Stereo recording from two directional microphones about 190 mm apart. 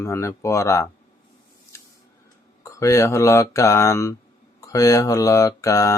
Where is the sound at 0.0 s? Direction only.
15° left (ahead or behind).